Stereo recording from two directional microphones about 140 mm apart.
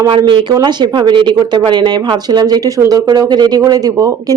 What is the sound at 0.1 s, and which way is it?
Speech, 35° right (ahead or behind).